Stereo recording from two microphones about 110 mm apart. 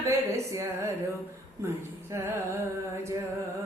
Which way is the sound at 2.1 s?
25° right (ahead or behind).